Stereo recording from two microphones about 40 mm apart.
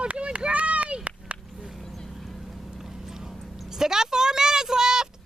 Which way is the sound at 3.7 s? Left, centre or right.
Centre.